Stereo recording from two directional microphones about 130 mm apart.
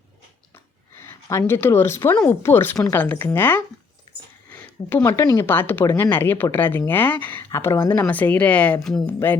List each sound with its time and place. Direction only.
1.0 s a woman's voice: 20° left (ahead or behind)
5.0 s speech: 30° left (ahead or behind)
5.4 s speech: 15° left (ahead or behind)
9.0 s speech: 15° left (ahead or behind)